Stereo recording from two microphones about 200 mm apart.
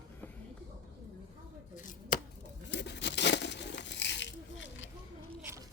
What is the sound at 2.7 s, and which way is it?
Crumpling, 60° left (ahead or behind).